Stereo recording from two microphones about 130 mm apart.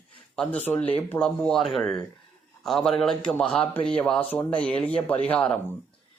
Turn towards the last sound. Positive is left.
turn(degrees=10)  # may be behind; listen again after turning